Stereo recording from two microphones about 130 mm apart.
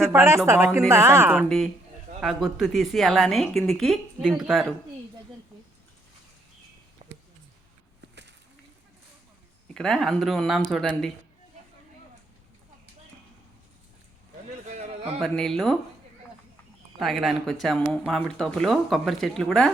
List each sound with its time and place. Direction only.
0.0 s a woman's voice: 20° right (ahead or behind)
1.5 s speech: centre (ahead or behind)
7.0 s a sound: 45° right (ahead or behind)
9.7 s speech: 5° left (ahead or behind)
14.7 s a sound: 60° right (ahead or behind)
15.2 s speech: centre (ahead or behind)
17.0 s speech: centre (ahead or behind)